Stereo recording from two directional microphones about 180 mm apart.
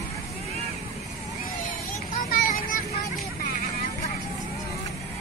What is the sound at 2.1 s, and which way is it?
Vehicle, 50° left (ahead or behind).